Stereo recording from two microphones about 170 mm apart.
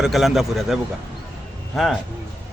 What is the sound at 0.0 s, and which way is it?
A man's voice, centre (ahead or behind).